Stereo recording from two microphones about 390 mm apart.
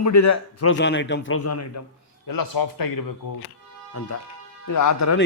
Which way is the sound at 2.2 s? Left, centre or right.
Left.